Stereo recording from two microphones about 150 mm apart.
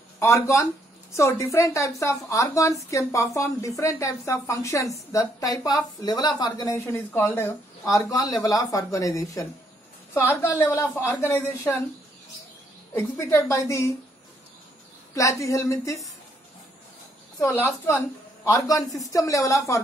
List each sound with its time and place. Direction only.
0.2 s a woman's voice: 20° left (ahead or behind)
12.9 s a woman's voice: 20° left (ahead or behind)
15.1 s a woman's voice: 20° left (ahead or behind)
17.4 s a woman's voice: 20° left (ahead or behind)